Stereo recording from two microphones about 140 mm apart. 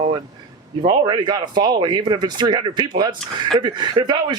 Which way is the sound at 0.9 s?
35° right (ahead or behind).